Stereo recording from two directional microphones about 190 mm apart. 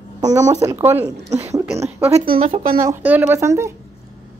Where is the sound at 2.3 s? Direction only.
30° right (ahead or behind).